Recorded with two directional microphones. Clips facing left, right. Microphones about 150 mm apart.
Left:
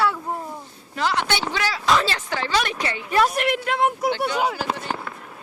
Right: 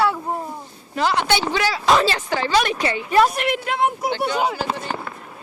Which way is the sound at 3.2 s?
Centre (ahead or behind).